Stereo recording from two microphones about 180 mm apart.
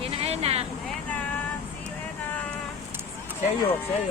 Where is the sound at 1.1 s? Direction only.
10° left (ahead or behind).